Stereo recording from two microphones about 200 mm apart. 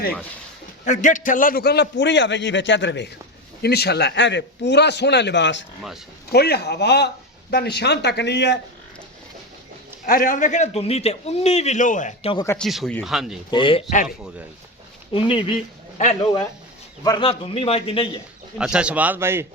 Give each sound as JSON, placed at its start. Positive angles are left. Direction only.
{"t": 0.9, "sound": "a man's voice", "side_deg": 40}
{"t": 10.1, "sound": "a man's voice", "side_deg": 45}
{"t": 12.5, "sound": "speech", "side_deg": 0}
{"t": 13.5, "sound": "a man's voice", "side_deg": 25}
{"t": 13.9, "sound": "a man's voice", "side_deg": 40}
{"t": 15.1, "sound": "a man's voice", "side_deg": 25}
{"t": 18.5, "sound": "a man's voice", "side_deg": -5}